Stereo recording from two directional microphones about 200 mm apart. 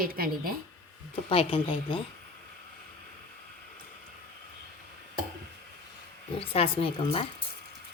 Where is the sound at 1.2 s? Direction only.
25° left (ahead or behind).